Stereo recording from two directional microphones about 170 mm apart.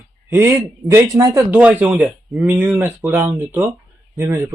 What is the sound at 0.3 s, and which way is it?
A man's voice, 15° right (ahead or behind).